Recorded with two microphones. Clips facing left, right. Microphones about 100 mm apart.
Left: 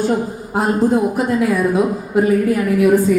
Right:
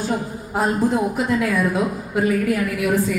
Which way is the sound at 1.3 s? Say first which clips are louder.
Left 3 dB; 25° left (ahead or behind).